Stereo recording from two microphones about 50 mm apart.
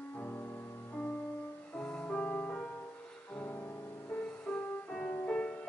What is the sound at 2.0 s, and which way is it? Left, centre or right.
Music, left.